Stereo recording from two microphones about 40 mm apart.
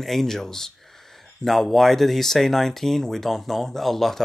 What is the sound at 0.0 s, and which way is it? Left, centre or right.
Speech, centre.